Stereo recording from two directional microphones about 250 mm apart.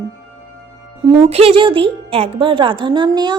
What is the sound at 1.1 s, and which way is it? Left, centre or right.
A woman's voice, right.